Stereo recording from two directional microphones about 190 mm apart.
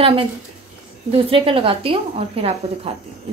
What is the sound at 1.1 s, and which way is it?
A woman's voice, 30° right (ahead or behind).